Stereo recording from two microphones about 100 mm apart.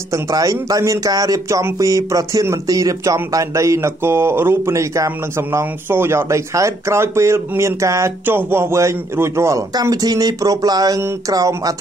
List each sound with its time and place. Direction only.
0.1 s a man's voice: 35° right (ahead or behind)